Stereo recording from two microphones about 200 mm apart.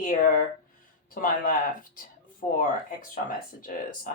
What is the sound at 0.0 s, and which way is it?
Speech, 45° left (ahead or behind).